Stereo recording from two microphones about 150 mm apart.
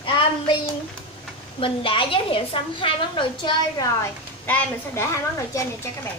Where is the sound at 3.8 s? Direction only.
15° left (ahead or behind).